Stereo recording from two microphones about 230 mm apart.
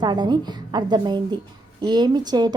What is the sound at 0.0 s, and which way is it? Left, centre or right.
A woman's voice, centre.